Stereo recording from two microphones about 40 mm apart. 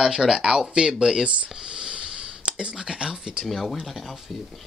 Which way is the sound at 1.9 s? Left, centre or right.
Right.